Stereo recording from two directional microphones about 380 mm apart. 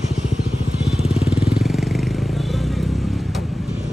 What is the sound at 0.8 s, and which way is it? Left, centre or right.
Vehicle, centre.